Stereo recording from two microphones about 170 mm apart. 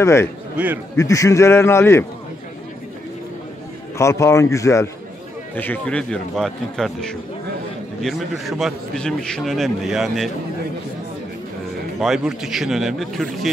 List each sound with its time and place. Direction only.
0.0 s a man's voice: 15° left (ahead or behind)
4.0 s a man's voice: 15° left (ahead or behind); by 10.3 s centre (ahead or behind)
12.0 s a man's voice: centre (ahead or behind)